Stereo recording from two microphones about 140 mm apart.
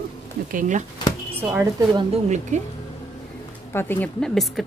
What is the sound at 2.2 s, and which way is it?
Speech, 55° right (ahead or behind).